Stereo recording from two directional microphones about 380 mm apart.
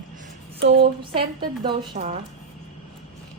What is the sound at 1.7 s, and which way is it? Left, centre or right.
Speech, centre.